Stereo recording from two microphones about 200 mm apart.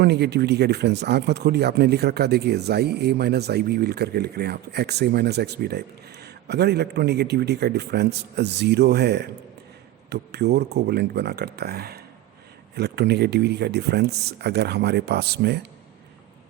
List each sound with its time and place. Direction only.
0.0 s speech: 55° right (ahead or behind)